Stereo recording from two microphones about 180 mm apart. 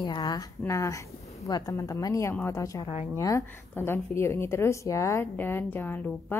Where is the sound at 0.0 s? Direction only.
25° left (ahead or behind).